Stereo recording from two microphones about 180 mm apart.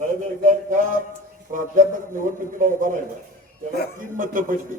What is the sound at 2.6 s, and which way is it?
Speech, 45° right (ahead or behind).